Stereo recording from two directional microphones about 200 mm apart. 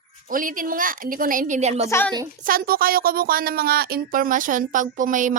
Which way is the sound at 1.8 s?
10° left (ahead or behind).